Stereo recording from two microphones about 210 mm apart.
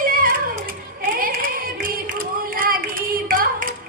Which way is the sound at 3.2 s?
45° right (ahead or behind).